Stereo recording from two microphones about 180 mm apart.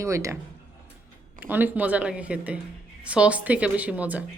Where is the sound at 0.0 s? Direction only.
15° right (ahead or behind).